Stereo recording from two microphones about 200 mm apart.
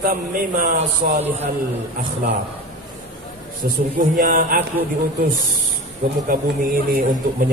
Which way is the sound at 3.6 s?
40° right (ahead or behind).